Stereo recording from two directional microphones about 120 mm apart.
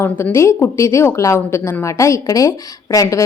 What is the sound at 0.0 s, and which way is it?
A woman's voice, 20° left (ahead or behind).